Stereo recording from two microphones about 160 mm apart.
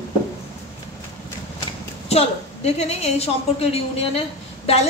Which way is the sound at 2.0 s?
40° left (ahead or behind).